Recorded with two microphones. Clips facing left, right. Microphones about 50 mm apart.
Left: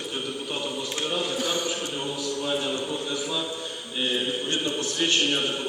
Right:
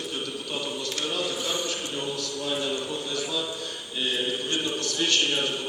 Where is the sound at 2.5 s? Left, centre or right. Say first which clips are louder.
Even; centre.